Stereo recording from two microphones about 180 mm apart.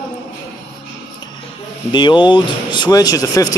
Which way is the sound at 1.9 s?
25° left (ahead or behind).